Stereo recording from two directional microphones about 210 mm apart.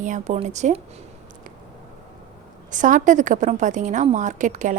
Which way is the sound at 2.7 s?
40° right (ahead or behind).